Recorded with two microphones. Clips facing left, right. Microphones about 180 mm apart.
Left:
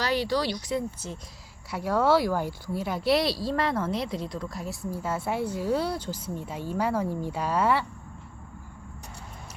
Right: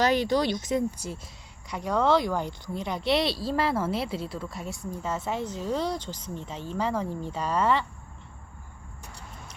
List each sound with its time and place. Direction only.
0.0 s speech: 20° right (ahead or behind)
1.7 s speech: 5° left (ahead or behind)